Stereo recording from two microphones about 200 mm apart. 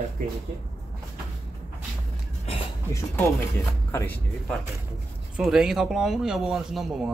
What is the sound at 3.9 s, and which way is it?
Speech, 10° left (ahead or behind).